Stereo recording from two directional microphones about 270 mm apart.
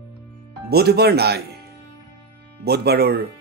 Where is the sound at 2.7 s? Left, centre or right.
Right.